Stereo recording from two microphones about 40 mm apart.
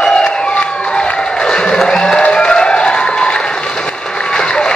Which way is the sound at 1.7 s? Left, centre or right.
Centre.